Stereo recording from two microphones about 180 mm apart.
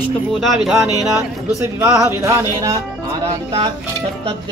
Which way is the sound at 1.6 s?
15° right (ahead or behind).